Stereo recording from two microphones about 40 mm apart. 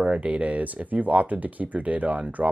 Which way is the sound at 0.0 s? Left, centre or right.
Right.